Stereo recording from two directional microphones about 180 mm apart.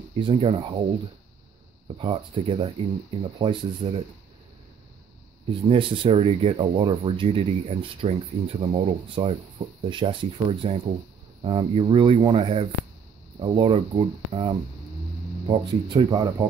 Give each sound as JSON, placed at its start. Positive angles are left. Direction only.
{"t": 0.2, "sound": "speech", "side_deg": -35}
{"t": 2.0, "sound": "speech", "side_deg": -30}
{"t": 5.5, "sound": "speech", "side_deg": -30}